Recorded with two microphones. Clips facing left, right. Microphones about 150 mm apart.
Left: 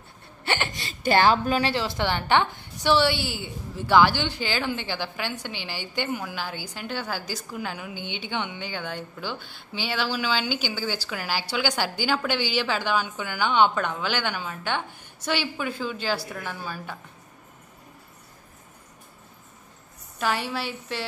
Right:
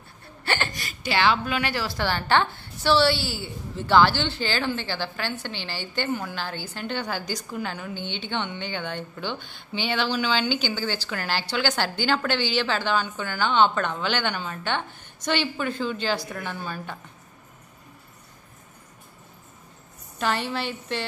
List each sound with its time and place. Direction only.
0.5 s a sound: 20° left (ahead or behind)
1.0 s speech: 45° left (ahead or behind)
1.7 s a woman's voice: 20° left (ahead or behind); by 17.0 s 5° left (ahead or behind)
20.2 s a woman's voice: 10° left (ahead or behind)